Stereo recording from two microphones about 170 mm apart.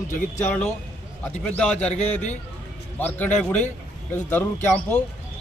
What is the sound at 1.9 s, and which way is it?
Speech, 40° left (ahead or behind).